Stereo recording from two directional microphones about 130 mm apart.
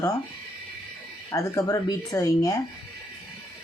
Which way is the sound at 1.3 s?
25° left (ahead or behind).